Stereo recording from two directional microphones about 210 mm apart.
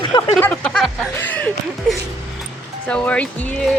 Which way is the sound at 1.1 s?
10° left (ahead or behind).